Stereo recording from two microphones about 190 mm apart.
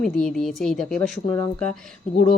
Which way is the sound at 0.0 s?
5° left (ahead or behind).